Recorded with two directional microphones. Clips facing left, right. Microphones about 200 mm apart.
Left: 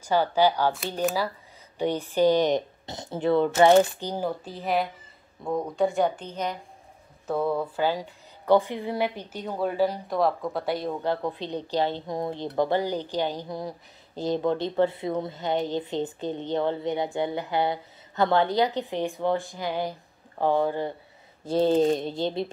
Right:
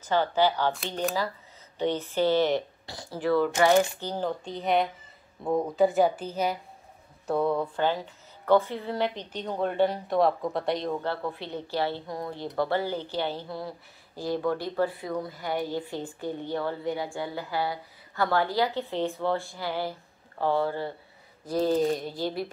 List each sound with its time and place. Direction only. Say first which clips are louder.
0.0 s a woman's voice: left 2 dB; 10° left (ahead or behind)
10.9 s a woman's voice: left 2 dB; 15° left (ahead or behind)